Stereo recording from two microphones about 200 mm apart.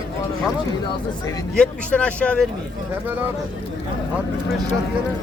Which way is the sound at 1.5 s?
5° left (ahead or behind).